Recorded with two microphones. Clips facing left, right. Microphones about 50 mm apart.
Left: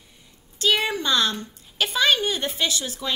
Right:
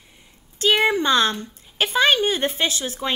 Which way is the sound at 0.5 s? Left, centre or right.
Right.